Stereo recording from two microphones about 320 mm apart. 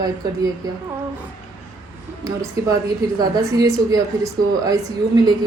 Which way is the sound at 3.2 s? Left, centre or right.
Centre.